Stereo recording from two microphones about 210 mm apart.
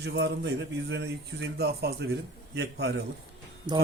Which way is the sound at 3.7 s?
20° right (ahead or behind).